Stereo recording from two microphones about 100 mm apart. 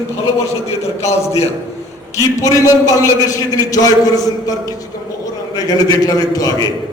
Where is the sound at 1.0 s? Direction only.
30° left (ahead or behind).